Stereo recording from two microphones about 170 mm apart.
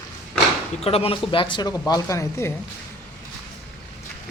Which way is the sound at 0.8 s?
35° left (ahead or behind).